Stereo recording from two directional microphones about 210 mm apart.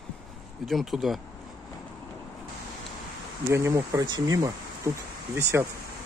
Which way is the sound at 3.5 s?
15° right (ahead or behind).